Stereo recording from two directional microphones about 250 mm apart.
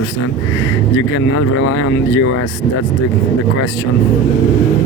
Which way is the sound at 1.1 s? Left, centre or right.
Left.